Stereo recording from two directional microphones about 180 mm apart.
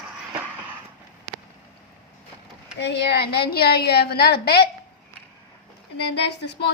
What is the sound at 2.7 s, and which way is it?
A woman's voice, 70° left (ahead or behind).